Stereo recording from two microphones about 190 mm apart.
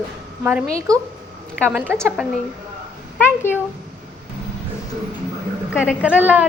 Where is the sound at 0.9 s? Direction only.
20° right (ahead or behind).